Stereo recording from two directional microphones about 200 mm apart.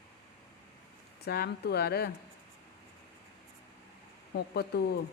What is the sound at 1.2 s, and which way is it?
Speech, 55° left (ahead or behind).